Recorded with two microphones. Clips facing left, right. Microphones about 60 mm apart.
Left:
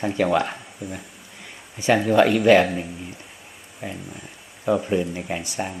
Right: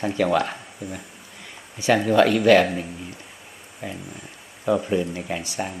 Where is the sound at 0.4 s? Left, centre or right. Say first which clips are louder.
Even; centre.